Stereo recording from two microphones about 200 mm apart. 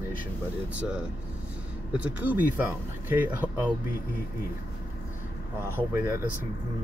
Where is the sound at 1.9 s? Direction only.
10° right (ahead or behind).